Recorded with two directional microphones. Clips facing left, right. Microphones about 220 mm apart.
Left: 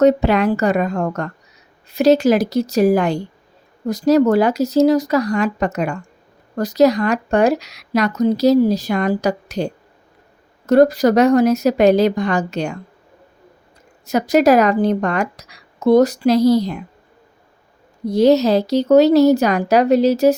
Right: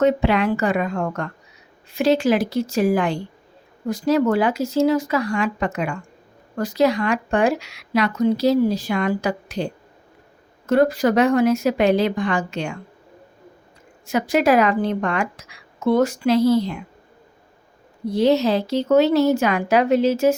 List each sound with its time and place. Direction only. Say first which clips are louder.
0.0 s speech: left 4 dB; 40° left (ahead or behind)
14.1 s speech: left 4 dB; 40° left (ahead or behind)
18.1 s speech: left 5 dB; 40° left (ahead or behind)